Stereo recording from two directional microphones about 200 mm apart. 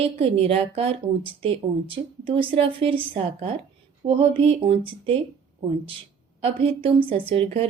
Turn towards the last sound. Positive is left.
turn(degrees=-25)  # may be behind; listen again after turning